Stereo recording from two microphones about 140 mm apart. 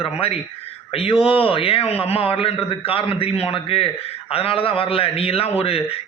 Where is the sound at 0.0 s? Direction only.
45° left (ahead or behind).